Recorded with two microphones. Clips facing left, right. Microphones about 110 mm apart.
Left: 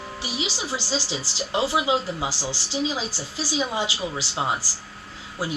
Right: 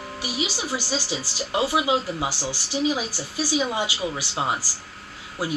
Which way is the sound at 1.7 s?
20° right (ahead or behind).